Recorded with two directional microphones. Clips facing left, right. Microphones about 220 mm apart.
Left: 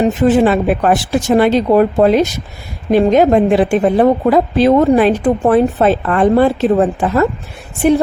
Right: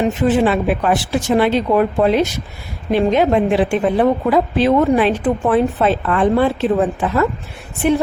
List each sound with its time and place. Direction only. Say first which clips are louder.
0.2 s a woman's voice: left 4 dB; 45° left (ahead or behind)